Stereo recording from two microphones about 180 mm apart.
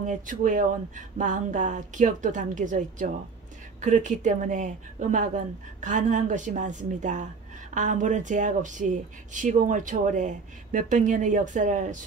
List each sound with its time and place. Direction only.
0.0 s speech: 45° right (ahead or behind)